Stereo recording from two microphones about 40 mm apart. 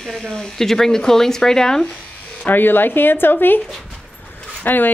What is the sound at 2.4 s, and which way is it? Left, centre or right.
A woman's voice, left.